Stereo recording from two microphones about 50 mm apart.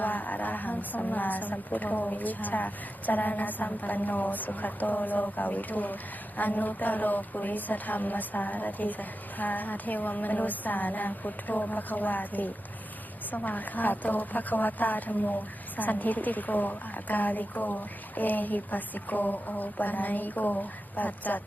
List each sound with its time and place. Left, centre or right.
0.0 s a woman's voice: left